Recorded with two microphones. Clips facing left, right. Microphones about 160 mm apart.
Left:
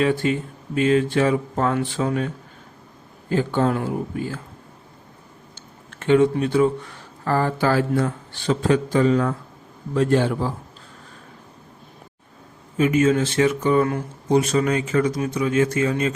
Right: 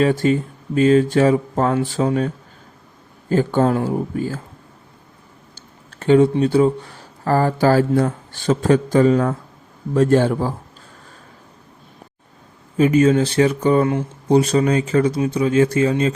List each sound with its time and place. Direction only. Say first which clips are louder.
0.0 s speech: right 4 dB; 40° right (ahead or behind)
5.5 s a man's voice: right 3 dB; 35° right (ahead or behind)
12.7 s speech: right 4 dB; 35° right (ahead or behind)